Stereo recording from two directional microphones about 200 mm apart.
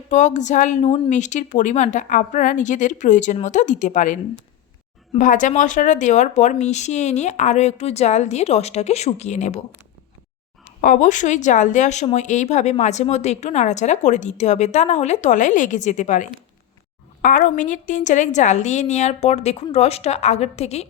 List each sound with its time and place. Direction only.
0.1 s speech: 40° left (ahead or behind)
10.8 s speech: 40° left (ahead or behind)